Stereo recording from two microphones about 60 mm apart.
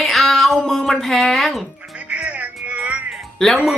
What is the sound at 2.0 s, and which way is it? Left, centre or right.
Music, right.